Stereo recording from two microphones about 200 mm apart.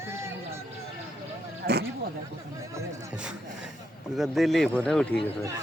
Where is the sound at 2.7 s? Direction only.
15° right (ahead or behind).